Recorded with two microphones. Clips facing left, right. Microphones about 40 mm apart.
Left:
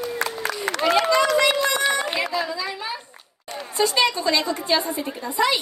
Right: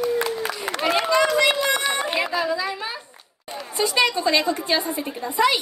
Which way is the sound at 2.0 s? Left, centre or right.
Centre.